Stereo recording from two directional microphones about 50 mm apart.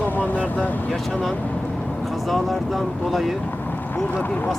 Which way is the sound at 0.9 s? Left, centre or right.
Centre.